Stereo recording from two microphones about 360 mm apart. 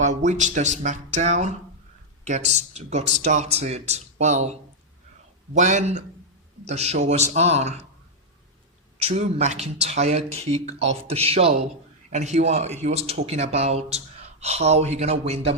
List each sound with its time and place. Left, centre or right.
0.0 s speech: centre
5.5 s speech: centre
9.0 s speech: centre